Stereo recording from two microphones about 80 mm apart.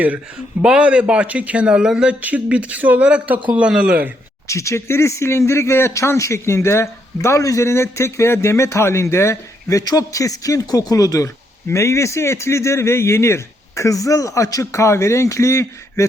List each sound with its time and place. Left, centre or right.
0.6 s speech: centre
4.4 s speech: left